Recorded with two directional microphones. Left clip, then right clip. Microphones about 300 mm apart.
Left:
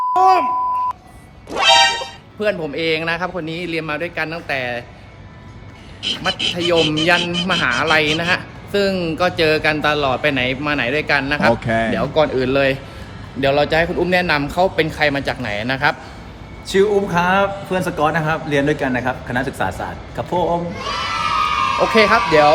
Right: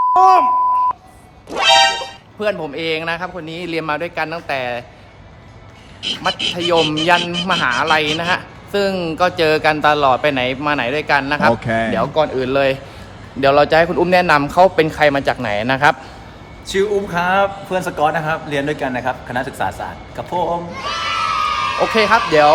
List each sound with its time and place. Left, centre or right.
0.1 s speech: centre
1.5 s speech: centre
6.0 s a man's voice: centre
11.5 s a man's voice: centre; by 16.0 s right
16.6 s a man's voice: centre
21.1 s a sound: centre
21.9 s a man's voice: centre